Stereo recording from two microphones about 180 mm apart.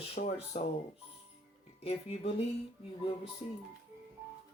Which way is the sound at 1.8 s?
35° left (ahead or behind).